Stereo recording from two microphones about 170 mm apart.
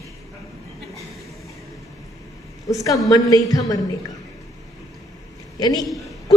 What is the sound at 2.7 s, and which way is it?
A woman's voice, 20° left (ahead or behind).